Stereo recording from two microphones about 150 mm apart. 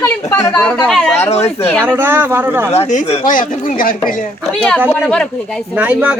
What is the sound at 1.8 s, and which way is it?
Speech, 15° right (ahead or behind).